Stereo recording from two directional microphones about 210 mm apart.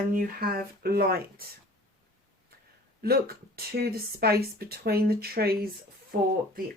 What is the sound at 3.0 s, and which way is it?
Speech, 45° right (ahead or behind).